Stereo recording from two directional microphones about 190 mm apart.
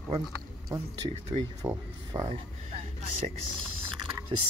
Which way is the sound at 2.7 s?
35° right (ahead or behind).